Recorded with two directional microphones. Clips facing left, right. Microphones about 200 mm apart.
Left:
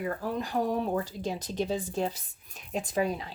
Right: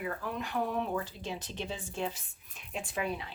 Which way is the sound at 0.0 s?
35° left (ahead or behind).